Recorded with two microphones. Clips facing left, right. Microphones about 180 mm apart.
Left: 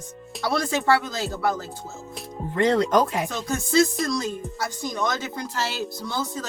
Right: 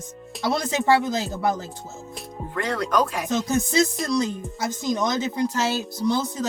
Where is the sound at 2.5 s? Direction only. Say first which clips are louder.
Left 4 dB; 25° left (ahead or behind).